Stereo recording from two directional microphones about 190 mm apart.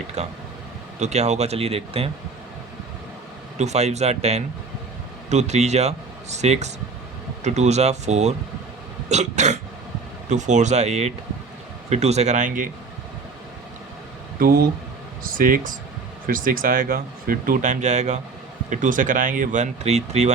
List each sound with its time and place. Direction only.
0.2 s speech: 35° right (ahead or behind)
3.6 s speech: 35° right (ahead or behind)
14.3 s speech: 50° right (ahead or behind); by 20.3 s 35° right (ahead or behind)